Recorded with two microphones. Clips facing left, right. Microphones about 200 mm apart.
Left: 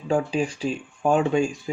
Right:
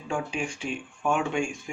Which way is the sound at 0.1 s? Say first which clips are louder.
Left 8 dB; 35° left (ahead or behind).